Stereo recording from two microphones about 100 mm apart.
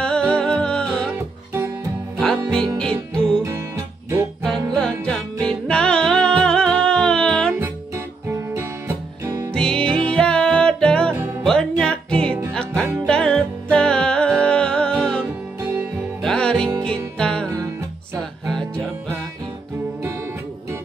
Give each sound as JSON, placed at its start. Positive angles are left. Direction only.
{"t": 0.0, "sound": "music", "side_deg": 10}
{"t": 1.1, "sound": "music", "side_deg": -25}
{"t": 2.8, "sound": "music", "side_deg": 10}
{"t": 3.4, "sound": "music", "side_deg": -30}
{"t": 4.4, "sound": "music", "side_deg": 5}
{"t": 7.6, "sound": "music", "side_deg": -30}
{"t": 9.5, "sound": "music", "side_deg": 10}
{"t": 16.2, "sound": "music", "side_deg": 5}